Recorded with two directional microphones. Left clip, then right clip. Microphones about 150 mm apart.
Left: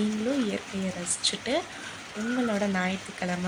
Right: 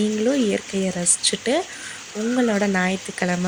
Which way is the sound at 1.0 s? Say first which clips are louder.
Right 5 dB; 40° right (ahead or behind).